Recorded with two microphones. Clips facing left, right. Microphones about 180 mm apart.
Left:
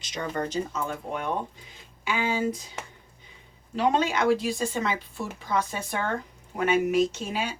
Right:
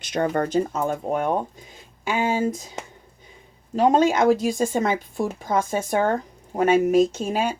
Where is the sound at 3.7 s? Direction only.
45° right (ahead or behind).